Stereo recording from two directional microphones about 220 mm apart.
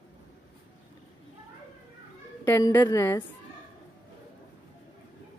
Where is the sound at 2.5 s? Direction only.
15° left (ahead or behind).